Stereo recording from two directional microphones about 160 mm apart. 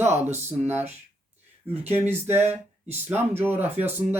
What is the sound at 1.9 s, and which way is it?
Speech, 15° right (ahead or behind).